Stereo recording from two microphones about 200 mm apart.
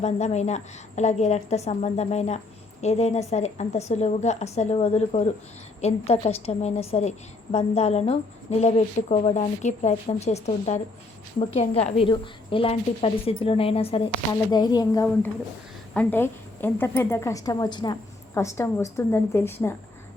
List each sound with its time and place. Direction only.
0.0 s a woman's voice: 35° left (ahead or behind); by 19.7 s 10° left (ahead or behind)